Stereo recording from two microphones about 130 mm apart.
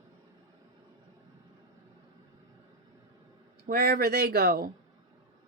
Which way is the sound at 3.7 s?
90° right.